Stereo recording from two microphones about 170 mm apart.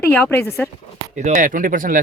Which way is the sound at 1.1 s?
50° right (ahead or behind).